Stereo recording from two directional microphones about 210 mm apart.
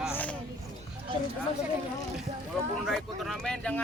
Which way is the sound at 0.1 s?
10° left (ahead or behind).